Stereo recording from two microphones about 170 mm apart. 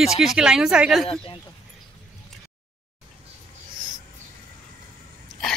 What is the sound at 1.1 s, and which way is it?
Speech, 35° left (ahead or behind).